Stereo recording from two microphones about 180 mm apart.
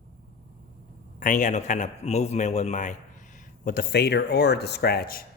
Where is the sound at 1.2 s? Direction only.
45° left (ahead or behind).